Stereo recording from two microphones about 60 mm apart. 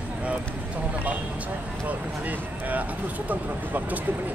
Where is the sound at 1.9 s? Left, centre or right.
Right.